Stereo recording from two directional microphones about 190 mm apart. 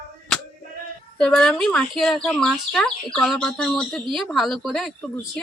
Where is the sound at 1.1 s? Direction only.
5° left (ahead or behind).